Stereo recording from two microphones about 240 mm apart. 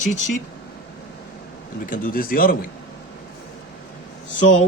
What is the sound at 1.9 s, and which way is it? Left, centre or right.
Speech, left.